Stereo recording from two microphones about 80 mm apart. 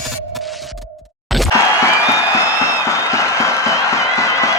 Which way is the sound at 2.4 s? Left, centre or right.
Left.